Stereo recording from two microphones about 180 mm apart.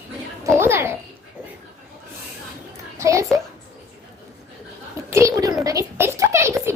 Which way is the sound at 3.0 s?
15° right (ahead or behind).